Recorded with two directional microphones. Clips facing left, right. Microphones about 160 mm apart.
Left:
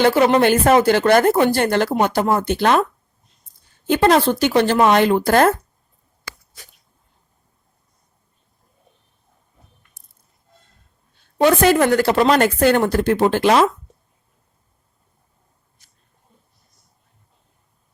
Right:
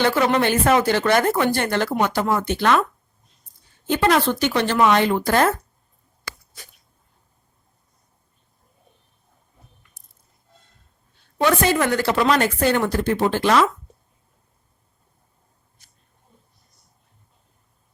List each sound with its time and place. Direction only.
0.0 s speech: 35° left (ahead or behind)
4.0 s speech: 40° left (ahead or behind)
11.4 s speech: 35° left (ahead or behind)